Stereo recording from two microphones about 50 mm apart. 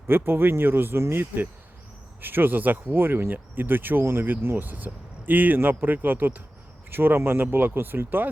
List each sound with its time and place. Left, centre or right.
0.1 s speech: right